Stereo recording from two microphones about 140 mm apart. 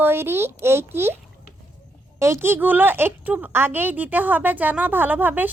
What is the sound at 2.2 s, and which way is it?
A woman's voice, 20° right (ahead or behind).